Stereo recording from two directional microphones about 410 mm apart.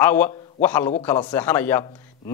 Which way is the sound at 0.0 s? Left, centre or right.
Centre.